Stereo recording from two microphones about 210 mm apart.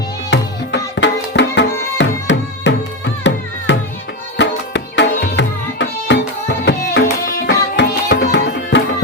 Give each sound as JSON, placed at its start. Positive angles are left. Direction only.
{"t": 0.3, "sound": "music", "side_deg": 60}
{"t": 4.4, "sound": "tabla", "side_deg": 55}